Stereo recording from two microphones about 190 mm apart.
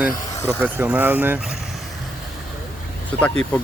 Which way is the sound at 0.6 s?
10° right (ahead or behind).